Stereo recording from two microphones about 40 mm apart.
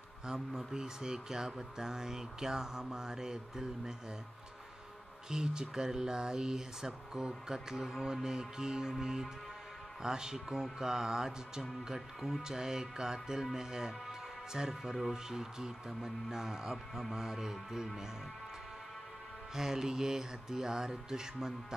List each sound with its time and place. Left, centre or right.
0.3 s speech: centre
5.3 s speech: centre
14.8 s speech: centre
15.2 s speech: centre
19.5 s speech: centre